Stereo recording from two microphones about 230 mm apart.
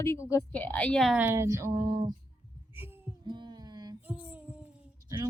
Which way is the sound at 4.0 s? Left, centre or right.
Centre.